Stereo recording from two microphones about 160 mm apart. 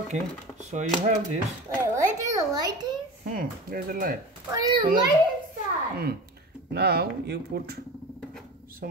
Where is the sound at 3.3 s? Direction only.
65° right (ahead or behind).